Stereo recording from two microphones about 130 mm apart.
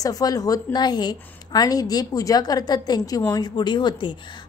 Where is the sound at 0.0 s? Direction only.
30° left (ahead or behind).